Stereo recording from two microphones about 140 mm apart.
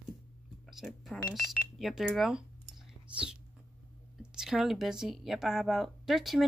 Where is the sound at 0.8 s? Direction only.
Centre (ahead or behind).